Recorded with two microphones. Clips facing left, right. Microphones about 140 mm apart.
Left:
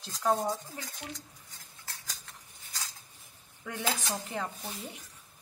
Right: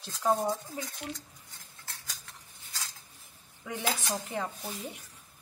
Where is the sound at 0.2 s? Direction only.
10° right (ahead or behind).